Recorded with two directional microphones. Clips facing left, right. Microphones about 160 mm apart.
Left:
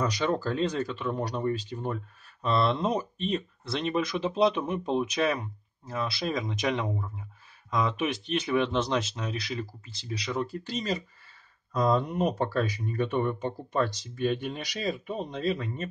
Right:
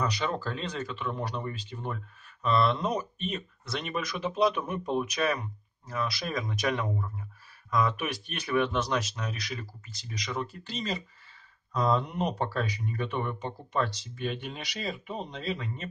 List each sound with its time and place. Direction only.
0.0 s speech: 40° left (ahead or behind)